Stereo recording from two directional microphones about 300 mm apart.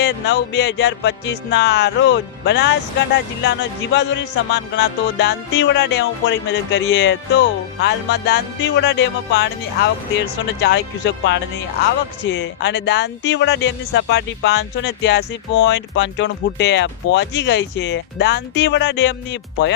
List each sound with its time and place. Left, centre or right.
0.0 s speech: left